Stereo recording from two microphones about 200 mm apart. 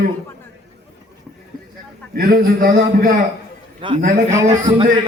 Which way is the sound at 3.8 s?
25° right (ahead or behind).